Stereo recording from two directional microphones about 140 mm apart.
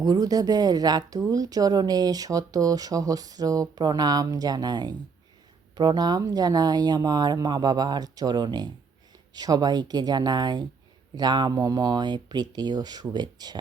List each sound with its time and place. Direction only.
0.0 s speech: 25° right (ahead or behind)